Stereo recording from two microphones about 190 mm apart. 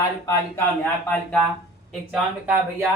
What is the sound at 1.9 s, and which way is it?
Speech, 5° right (ahead or behind).